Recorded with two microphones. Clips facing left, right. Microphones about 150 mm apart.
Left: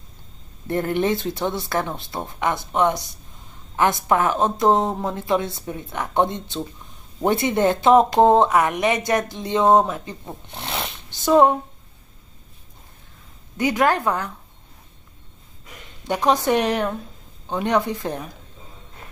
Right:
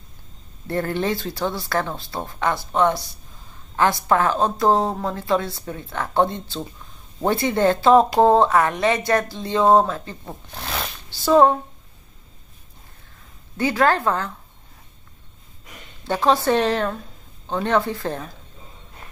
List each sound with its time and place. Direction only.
0.7 s speech: 20° left (ahead or behind)
13.6 s a woman's voice: 15° left (ahead or behind)
16.0 s a woman's voice: 15° left (ahead or behind)